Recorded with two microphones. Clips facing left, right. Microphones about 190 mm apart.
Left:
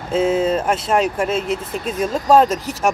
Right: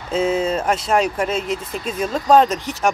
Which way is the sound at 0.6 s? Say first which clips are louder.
Left 1 dB; 5° left (ahead or behind).